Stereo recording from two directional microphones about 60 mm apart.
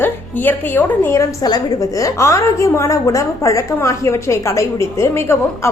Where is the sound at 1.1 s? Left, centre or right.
Left.